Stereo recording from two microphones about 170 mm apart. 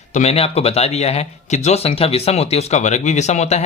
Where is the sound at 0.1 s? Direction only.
40° left (ahead or behind).